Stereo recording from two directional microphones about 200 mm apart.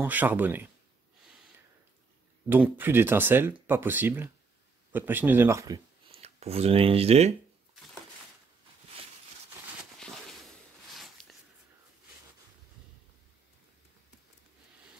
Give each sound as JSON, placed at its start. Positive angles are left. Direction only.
{"t": 0.0, "sound": "speech", "side_deg": -10}
{"t": 2.5, "sound": "speech", "side_deg": -10}
{"t": 6.1, "sound": "speech", "side_deg": -30}
{"t": 9.9, "sound": "a sound", "side_deg": 5}